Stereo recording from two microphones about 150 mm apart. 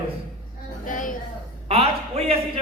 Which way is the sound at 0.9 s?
60° left (ahead or behind).